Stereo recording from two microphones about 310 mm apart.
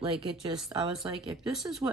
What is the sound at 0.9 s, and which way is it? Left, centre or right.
Speech, centre.